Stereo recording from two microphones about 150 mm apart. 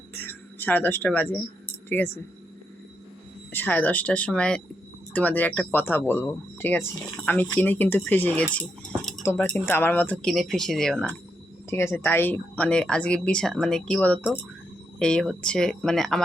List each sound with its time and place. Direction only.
0.1 s a sound: 15° left (ahead or behind)
3.5 s speech: 10° left (ahead or behind)
8.5 s cutlery: 5° left (ahead or behind)
9.2 s speech: 15° left (ahead or behind)